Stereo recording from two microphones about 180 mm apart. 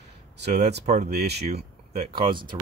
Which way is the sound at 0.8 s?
40° right (ahead or behind).